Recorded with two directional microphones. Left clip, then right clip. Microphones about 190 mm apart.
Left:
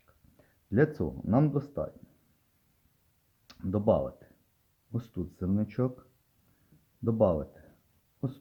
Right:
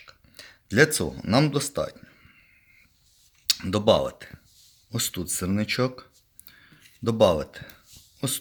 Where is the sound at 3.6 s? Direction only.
15° right (ahead or behind).